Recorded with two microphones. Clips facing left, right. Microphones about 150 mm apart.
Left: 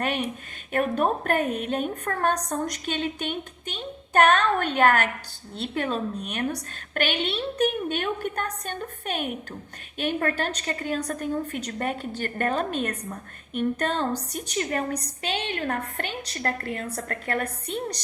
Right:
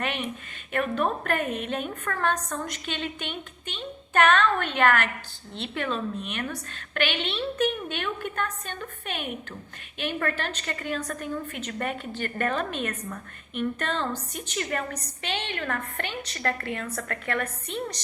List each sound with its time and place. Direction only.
0.0 s a woman's voice: 45° left (ahead or behind)